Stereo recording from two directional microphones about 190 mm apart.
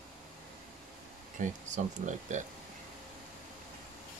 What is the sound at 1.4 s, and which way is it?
Speech, 40° right (ahead or behind).